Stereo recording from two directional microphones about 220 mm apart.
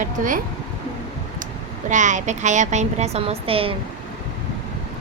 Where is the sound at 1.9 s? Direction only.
35° right (ahead or behind).